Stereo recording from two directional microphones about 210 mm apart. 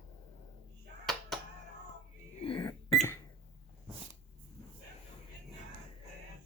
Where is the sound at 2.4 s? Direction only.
25° left (ahead or behind).